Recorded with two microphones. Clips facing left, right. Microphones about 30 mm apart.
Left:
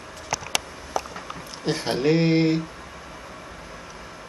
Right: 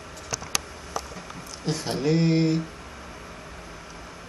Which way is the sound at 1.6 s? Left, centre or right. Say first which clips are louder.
Left 4 dB; left.